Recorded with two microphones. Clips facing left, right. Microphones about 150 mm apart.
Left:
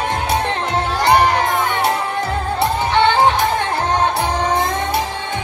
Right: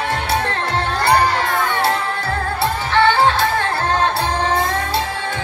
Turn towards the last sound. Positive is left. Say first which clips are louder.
# left 1 dB
turn(degrees=20)  # may be behind; listen again after turning